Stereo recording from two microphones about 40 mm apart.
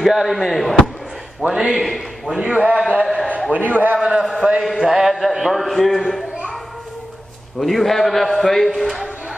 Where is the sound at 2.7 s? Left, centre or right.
Right.